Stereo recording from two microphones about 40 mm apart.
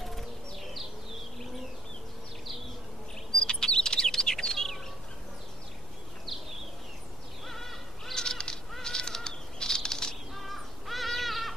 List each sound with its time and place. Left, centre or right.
0.0 s bird: centre
3.3 s chirp: centre
7.4 s bird: centre
10.3 s crow: centre